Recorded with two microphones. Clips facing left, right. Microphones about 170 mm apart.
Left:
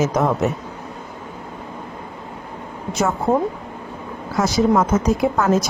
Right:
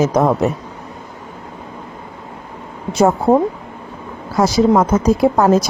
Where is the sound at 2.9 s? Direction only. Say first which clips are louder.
Right 7 dB; 35° right (ahead or behind).